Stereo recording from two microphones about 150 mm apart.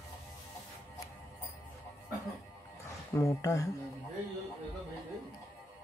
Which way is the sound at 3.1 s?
20° left (ahead or behind).